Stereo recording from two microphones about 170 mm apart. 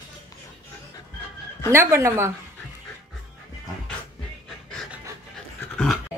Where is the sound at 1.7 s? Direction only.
15° right (ahead or behind).